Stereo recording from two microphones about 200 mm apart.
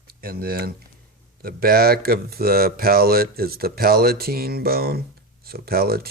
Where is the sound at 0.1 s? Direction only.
50° right (ahead or behind).